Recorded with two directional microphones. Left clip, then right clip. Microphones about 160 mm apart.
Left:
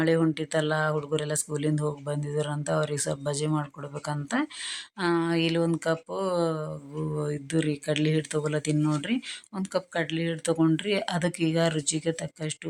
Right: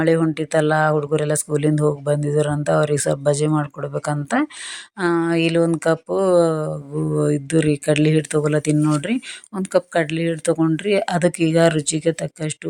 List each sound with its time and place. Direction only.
0.0 s speech: 30° right (ahead or behind)